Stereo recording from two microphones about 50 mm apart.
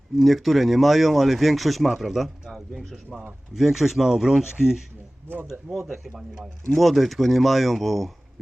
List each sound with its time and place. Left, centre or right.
0.2 s speech: centre
5.3 s speech: right
6.1 s speech: centre